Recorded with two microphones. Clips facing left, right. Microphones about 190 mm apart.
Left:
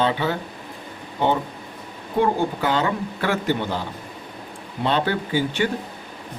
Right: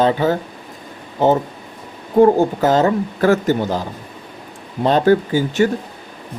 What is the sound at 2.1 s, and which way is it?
Speech, 40° right (ahead or behind).